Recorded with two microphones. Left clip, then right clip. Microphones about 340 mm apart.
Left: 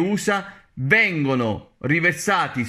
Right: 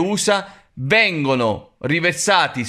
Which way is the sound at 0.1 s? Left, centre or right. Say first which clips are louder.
Right 4 dB; centre.